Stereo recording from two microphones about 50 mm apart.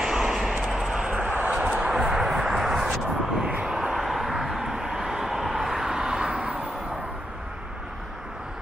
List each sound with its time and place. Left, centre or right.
0.0 s vehicle: centre; by 1.5 s right
1.6 s a sound: right; by 3.0 s centre
3.3 s vehicle: centre
3.9 s vehicle: centre; by 6.6 s right